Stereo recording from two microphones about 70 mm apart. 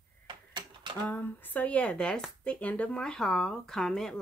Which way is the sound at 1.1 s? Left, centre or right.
Left.